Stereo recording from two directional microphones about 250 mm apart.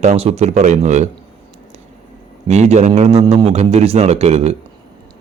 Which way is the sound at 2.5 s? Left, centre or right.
Right.